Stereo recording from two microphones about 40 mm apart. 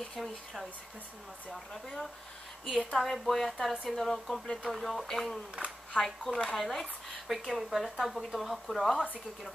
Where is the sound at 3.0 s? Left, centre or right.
Centre.